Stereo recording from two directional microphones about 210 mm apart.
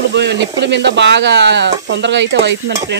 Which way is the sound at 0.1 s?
55° right (ahead or behind).